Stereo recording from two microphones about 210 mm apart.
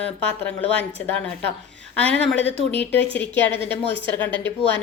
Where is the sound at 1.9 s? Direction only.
5° left (ahead or behind).